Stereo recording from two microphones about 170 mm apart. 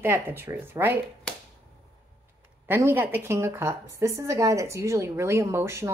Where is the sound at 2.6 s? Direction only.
10° right (ahead or behind).